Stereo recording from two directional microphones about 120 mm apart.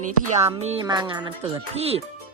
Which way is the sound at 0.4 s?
65° right (ahead or behind).